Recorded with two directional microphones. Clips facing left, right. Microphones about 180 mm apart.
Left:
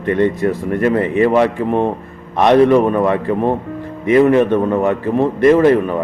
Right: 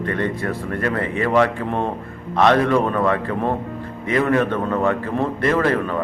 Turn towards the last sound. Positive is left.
turn(degrees=15)  # may be behind; listen again after turning